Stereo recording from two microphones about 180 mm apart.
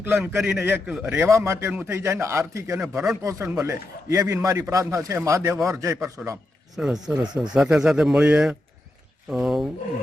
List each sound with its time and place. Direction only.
0.0 s a man's voice: 10° right (ahead or behind)
2.9 s a man's voice: centre (ahead or behind)
3.6 s a man's voice: 15° right (ahead or behind)
6.7 s a man's voice: centre (ahead or behind)